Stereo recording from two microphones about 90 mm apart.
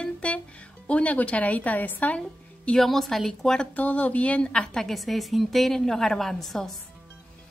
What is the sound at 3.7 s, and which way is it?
A woman's voice, 15° left (ahead or behind).